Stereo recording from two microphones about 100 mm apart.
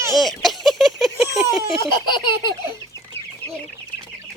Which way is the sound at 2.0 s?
50° left (ahead or behind).